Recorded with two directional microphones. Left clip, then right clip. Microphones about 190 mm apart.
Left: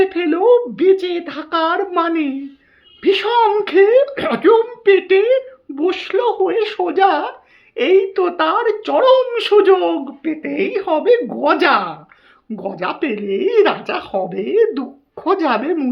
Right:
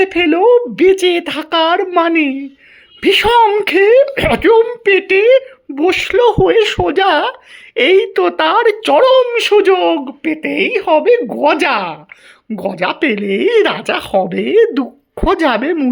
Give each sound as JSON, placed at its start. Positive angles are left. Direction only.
{"t": 0.0, "sound": "speech", "side_deg": -30}